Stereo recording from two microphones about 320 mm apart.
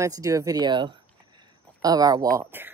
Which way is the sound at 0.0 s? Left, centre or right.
Centre.